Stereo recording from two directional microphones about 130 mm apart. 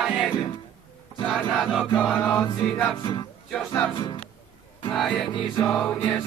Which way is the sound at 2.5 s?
40° left (ahead or behind).